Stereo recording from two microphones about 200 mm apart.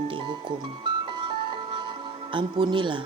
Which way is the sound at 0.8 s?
25° right (ahead or behind).